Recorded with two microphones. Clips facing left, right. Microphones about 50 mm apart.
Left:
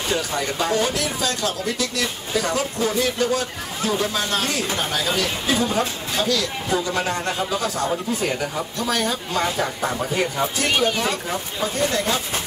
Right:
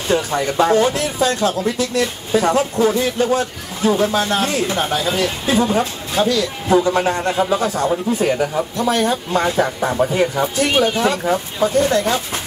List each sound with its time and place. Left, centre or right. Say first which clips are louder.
0.1 s speech: right 8 dB; right